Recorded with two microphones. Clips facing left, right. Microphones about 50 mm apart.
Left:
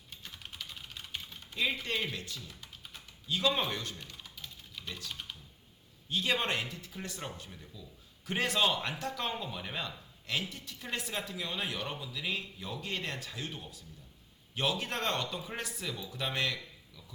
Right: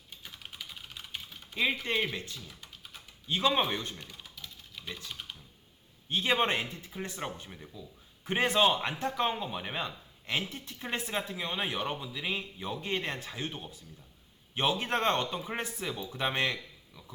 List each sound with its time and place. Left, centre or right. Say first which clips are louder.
0.1 s typing: right 1 dB; centre
1.8 s speech: right 4 dB; right
2.5 s typing: even; centre
3.2 s speech: right 3 dB; right
3.9 s typing: right 1 dB; centre
6.1 s speech: right 4 dB; right